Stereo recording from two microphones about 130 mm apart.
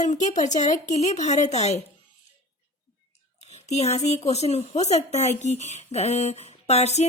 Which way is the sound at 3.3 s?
55° left (ahead or behind).